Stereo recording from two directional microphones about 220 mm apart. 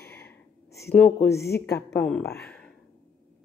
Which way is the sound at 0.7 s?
10° left (ahead or behind).